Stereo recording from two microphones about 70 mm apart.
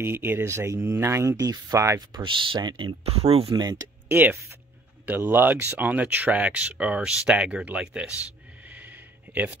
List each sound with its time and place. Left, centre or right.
0.0 s speech: right
1.4 s speech: right
2.0 s speech: right
3.4 s speech: right
4.1 s speech: right
8.6 s a sound: right